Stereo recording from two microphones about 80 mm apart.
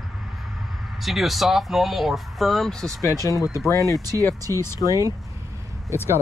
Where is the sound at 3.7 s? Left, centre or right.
Left.